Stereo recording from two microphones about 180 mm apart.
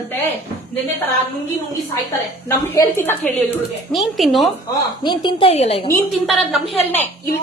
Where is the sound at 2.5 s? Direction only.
20° left (ahead or behind).